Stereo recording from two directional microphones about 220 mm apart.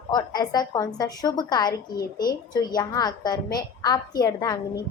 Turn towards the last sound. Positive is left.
turn(degrees=15)  # may be behind; listen again after turning